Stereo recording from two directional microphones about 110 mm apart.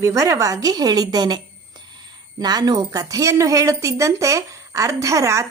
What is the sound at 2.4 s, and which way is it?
A woman's voice, 40° right (ahead or behind).